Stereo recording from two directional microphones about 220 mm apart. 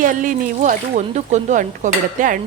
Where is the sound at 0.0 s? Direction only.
35° right (ahead or behind).